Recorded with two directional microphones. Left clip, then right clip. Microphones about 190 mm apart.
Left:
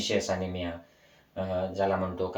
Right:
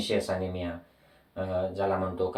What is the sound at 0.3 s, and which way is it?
Speech, 10° right (ahead or behind).